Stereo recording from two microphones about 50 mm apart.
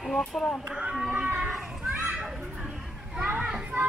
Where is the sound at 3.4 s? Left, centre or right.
Centre.